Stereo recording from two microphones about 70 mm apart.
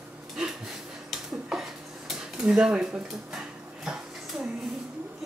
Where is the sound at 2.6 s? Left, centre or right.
Centre.